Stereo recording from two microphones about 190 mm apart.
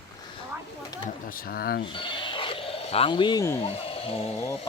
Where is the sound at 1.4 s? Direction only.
50° left (ahead or behind).